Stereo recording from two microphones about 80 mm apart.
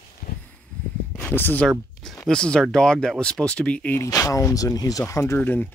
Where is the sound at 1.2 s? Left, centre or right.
Left.